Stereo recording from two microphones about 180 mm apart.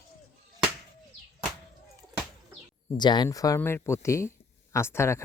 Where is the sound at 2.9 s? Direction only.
25° left (ahead or behind).